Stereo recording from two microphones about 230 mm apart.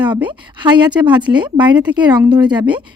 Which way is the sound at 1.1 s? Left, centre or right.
Centre.